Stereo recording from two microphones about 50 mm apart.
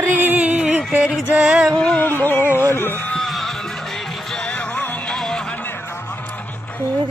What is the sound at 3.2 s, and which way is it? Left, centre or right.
Music, centre.